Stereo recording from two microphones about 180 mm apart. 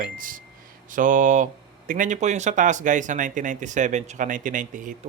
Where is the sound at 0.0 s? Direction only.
50° right (ahead or behind).